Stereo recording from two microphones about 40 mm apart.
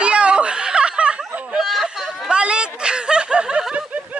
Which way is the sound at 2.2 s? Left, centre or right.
Right.